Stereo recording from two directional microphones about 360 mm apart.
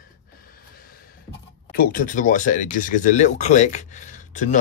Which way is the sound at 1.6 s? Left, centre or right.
Left.